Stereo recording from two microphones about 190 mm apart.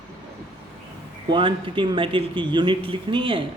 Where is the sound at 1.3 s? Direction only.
25° right (ahead or behind).